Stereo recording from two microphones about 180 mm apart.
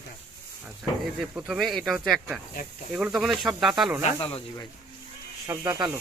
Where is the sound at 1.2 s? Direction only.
Centre (ahead or behind).